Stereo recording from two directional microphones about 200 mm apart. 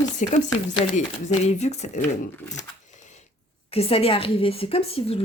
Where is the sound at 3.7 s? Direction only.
30° left (ahead or behind).